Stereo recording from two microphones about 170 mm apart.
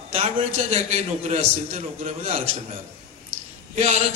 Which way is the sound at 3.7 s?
45° right (ahead or behind).